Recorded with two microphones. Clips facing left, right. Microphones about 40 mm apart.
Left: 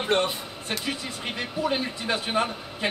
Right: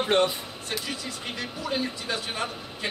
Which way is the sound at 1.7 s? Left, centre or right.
Left.